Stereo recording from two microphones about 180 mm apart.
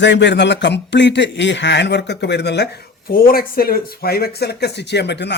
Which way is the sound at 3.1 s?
55° left (ahead or behind).